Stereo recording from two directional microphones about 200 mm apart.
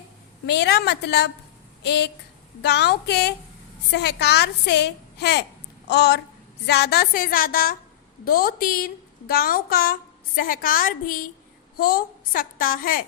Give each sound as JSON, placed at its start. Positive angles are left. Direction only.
{"t": 0.4, "sound": "a woman's voice", "side_deg": 55}